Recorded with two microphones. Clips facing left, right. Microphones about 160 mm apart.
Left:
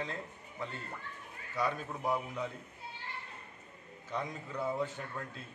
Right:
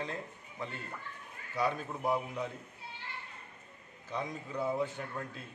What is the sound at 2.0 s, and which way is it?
Speech, 5° right (ahead or behind).